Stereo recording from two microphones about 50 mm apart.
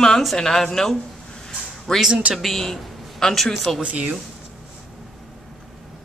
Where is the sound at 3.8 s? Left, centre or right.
Right.